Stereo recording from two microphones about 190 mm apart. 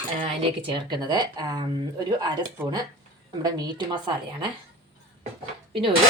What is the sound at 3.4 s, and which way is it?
Speech, 20° right (ahead or behind).